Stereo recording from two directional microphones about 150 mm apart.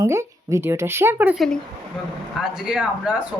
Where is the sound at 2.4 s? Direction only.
5° right (ahead or behind).